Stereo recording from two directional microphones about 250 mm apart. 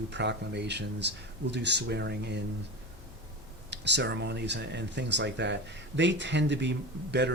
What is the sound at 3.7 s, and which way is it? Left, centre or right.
Speech, right.